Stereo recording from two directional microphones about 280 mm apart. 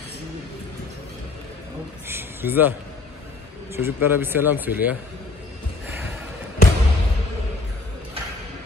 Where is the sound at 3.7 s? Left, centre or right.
Centre.